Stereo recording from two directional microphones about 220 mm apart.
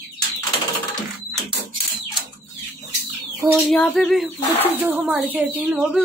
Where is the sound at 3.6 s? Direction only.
Centre (ahead or behind).